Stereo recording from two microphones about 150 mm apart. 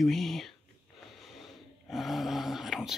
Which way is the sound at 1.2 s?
Centre (ahead or behind).